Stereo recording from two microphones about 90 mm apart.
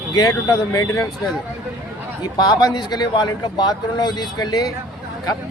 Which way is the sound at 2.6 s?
50° left (ahead or behind).